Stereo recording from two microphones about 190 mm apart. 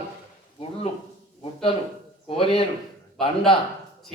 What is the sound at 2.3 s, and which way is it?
Speech, 30° left (ahead or behind).